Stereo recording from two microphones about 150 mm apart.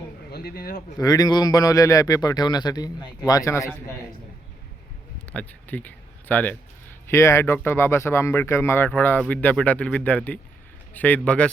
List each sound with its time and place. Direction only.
0.3 s speech: 90° left
0.9 s a man's voice: 25° left (ahead or behind)
5.3 s speech: 10° left (ahead or behind)